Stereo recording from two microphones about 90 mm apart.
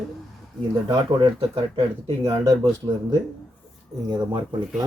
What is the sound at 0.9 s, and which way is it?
Speech, 65° right (ahead or behind).